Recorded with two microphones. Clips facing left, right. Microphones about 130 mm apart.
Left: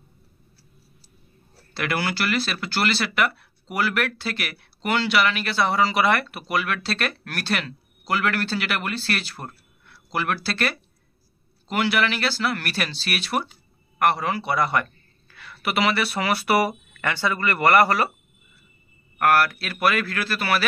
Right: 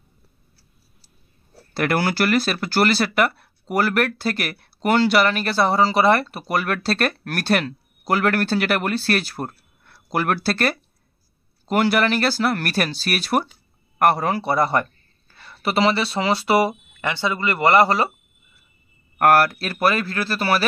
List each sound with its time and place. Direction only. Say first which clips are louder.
1.7 s a man's voice: right 5 dB; 45° right (ahead or behind); by 18.1 s 25° right (ahead or behind)
19.1 s speech: right 4 dB; 45° right (ahead or behind)